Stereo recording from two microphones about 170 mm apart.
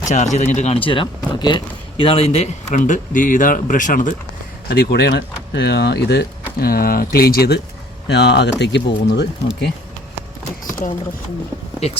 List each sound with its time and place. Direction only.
0.0 s speech: 45° left (ahead or behind)
0.9 s speech: 30° left (ahead or behind); by 4.1 s 50° left (ahead or behind)
4.7 s speech: 75° left (ahead or behind)
6.6 s speech: 60° left (ahead or behind)
8.0 s speech: 80° left
10.7 s speech: 50° left (ahead or behind)